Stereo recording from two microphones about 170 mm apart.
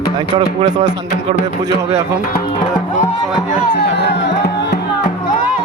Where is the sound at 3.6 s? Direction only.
75° left (ahead or behind).